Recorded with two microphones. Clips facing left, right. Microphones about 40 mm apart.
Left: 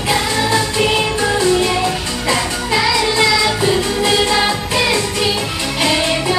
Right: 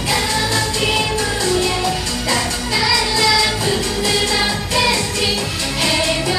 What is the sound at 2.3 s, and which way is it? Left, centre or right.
Music, centre.